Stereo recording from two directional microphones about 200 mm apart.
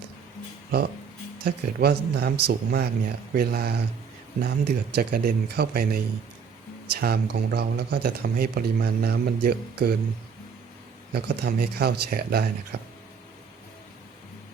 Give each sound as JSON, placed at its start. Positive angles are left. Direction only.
{"t": 1.5, "sound": "speech", "side_deg": -50}
{"t": 11.1, "sound": "speech", "side_deg": -50}